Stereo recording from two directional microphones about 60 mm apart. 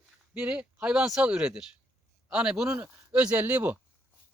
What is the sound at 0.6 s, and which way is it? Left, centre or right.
Speech, centre.